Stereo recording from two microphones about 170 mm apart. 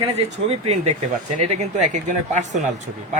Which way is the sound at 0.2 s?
35° right (ahead or behind).